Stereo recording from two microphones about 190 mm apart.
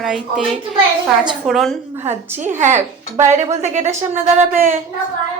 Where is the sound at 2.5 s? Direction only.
40° right (ahead or behind).